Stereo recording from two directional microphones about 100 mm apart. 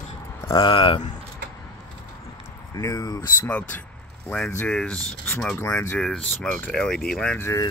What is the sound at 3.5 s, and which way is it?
Speech, 15° left (ahead or behind).